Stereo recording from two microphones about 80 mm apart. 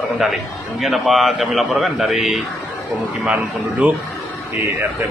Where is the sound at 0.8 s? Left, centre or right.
Centre.